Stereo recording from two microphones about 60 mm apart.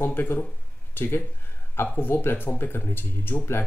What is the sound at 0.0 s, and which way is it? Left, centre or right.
Speech, left.